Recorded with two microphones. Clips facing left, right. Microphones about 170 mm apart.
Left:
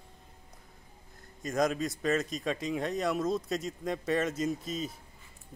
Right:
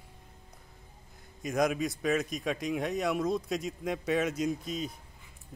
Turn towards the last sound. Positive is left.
turn(degrees=0)  # may be behind; listen again after turning